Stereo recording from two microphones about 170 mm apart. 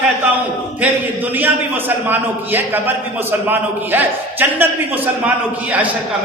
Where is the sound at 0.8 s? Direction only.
10° right (ahead or behind).